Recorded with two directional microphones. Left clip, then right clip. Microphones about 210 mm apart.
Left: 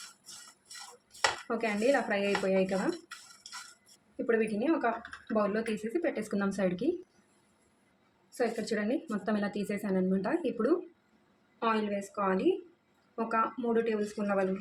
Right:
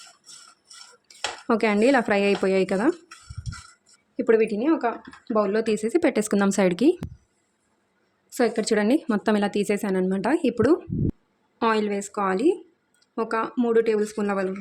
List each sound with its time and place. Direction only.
1.0 s speech: 55° right (ahead or behind)
4.3 s speech: 50° right (ahead or behind)
8.3 s speech: 55° right (ahead or behind)
11.6 s speech: 55° right (ahead or behind)